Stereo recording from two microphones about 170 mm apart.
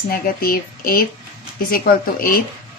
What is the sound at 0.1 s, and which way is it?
A woman's voice, 60° left (ahead or behind).